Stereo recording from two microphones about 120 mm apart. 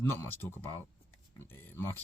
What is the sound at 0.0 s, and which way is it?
Speech, 20° left (ahead or behind).